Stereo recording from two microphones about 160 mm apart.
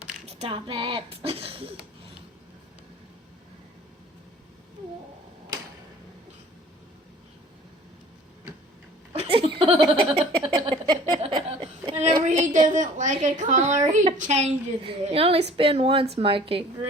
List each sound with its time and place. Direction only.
0.3 s speech: 35° right (ahead or behind)
9.1 s laughter: 40° right (ahead or behind)
12.3 s a woman's voice: 50° right (ahead or behind)